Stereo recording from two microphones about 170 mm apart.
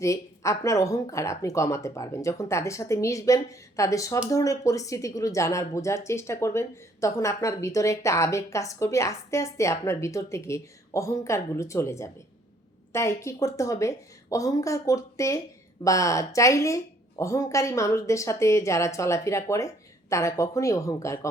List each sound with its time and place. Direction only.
0.0 s a woman's voice: 20° left (ahead or behind)